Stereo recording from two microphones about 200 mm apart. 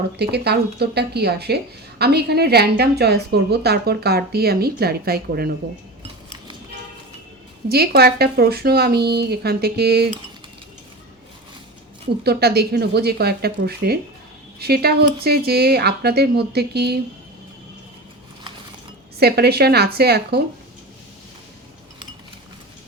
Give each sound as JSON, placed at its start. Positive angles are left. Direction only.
{"t": 0.2, "sound": "a woman's voice", "side_deg": -55}
{"t": 7.7, "sound": "a woman's voice", "side_deg": -50}
{"t": 12.2, "sound": "a woman's voice", "side_deg": -55}
{"t": 19.2, "sound": "a woman's voice", "side_deg": -55}